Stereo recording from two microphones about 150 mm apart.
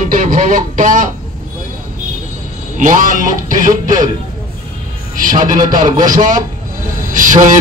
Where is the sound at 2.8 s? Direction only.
60° right (ahead or behind).